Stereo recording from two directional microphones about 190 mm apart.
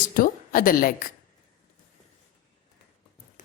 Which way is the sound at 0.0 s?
45° left (ahead or behind).